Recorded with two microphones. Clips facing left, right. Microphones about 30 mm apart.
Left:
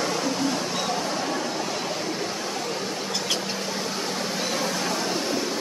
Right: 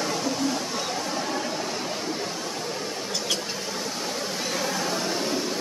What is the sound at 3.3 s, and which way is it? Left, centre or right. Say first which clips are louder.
Vehicle: left 1 dB; centre.